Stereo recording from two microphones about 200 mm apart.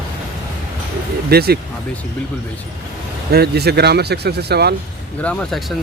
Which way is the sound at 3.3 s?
55° right (ahead or behind).